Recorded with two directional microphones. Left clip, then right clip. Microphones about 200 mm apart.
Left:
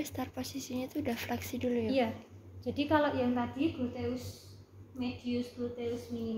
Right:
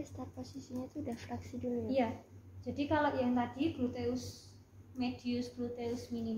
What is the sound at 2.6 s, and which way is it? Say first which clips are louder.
A woman's voice: left 3 dB; 50° left (ahead or behind).